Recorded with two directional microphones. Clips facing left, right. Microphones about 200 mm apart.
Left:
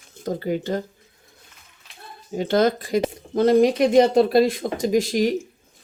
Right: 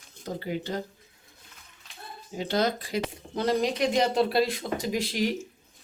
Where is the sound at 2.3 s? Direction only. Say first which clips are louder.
Left 7 dB; 50° left (ahead or behind).